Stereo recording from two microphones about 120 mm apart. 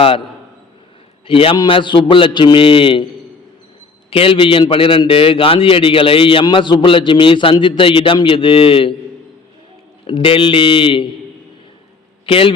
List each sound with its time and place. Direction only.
1.3 s a man's voice: 50° left (ahead or behind)
4.1 s a man's voice: 50° left (ahead or behind)
10.1 s a man's voice: 45° left (ahead or behind)
12.2 s a man's voice: 50° left (ahead or behind)